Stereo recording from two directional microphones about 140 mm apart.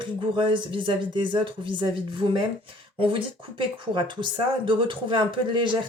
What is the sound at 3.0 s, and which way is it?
Speech, 40° right (ahead or behind).